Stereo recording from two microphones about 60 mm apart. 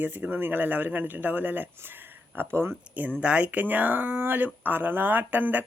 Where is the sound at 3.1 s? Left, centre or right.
Right.